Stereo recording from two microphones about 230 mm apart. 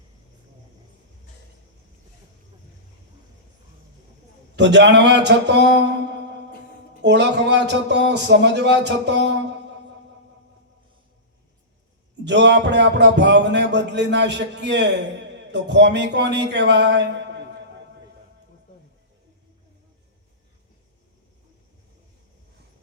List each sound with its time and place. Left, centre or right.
4.5 s a man's voice: right
12.2 s a man's voice: right